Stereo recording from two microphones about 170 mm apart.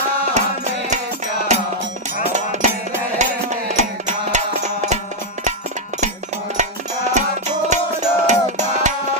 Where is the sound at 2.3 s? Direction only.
45° right (ahead or behind).